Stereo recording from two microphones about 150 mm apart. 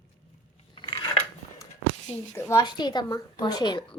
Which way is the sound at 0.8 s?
30° left (ahead or behind).